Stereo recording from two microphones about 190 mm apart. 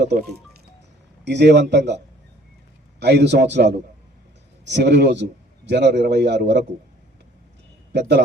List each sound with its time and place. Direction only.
1.2 s a man's voice: 65° right (ahead or behind)
3.0 s a man's voice: 60° right (ahead or behind)
7.9 s a man's voice: 65° right (ahead or behind)